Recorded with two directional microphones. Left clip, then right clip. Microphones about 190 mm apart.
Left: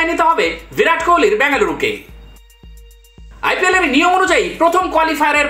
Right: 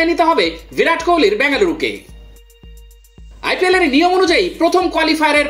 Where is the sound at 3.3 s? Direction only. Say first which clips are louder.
Even; 40° right (ahead or behind).